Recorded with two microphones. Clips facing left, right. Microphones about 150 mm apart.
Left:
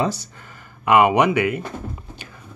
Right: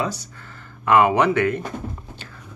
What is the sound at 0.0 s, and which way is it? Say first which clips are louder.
Speech: left 3 dB; 25° left (ahead or behind).